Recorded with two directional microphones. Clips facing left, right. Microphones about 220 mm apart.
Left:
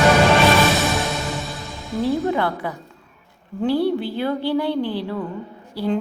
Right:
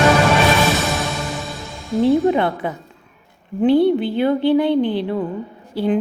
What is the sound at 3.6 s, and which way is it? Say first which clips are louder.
A woman's voice: right 6 dB; 20° right (ahead or behind).